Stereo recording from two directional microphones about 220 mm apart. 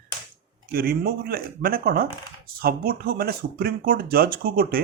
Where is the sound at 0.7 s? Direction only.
45° right (ahead or behind).